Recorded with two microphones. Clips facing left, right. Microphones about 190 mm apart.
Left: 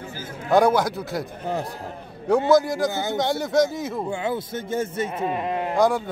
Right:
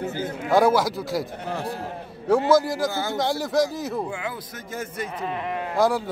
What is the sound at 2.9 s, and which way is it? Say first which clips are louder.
Speech: left 1 dB; 20° left (ahead or behind).